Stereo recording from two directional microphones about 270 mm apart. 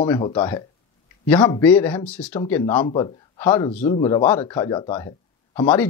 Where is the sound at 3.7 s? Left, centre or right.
Left.